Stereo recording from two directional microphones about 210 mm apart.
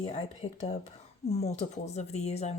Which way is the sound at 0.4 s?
30° left (ahead or behind).